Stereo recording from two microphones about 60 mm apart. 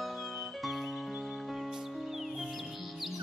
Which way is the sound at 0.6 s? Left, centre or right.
Centre.